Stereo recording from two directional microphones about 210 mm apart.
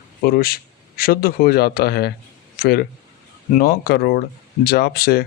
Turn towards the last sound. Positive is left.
turn(degrees=45)  # may be behind; listen again after turning